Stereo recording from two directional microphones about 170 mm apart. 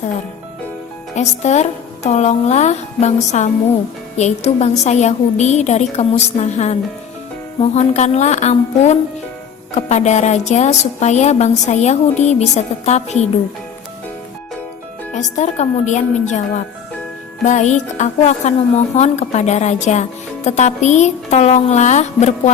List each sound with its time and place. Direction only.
1.1 s a woman's voice: 40° left (ahead or behind)
15.1 s speech: 45° left (ahead or behind)
17.4 s speech: 45° left (ahead or behind)